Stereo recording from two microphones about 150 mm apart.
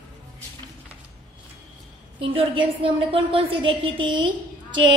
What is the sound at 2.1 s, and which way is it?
A woman's voice, 35° right (ahead or behind).